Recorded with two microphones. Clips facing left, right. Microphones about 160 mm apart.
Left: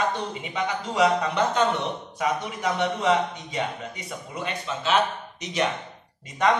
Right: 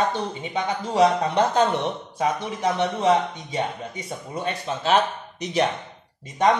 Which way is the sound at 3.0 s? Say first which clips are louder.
Right 4 dB; 30° right (ahead or behind).